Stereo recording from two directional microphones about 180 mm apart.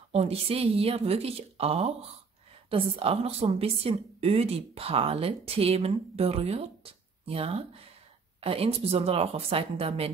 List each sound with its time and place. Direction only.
0.1 s a woman's voice: 35° right (ahead or behind)